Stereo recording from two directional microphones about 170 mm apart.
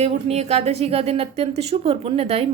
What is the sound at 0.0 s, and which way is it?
A woman's voice, 40° right (ahead or behind).